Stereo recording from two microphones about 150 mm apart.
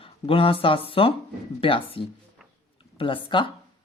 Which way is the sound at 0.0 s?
35° left (ahead or behind).